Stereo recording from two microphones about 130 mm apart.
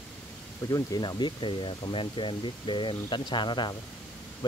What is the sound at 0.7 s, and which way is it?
Speech, 30° left (ahead or behind).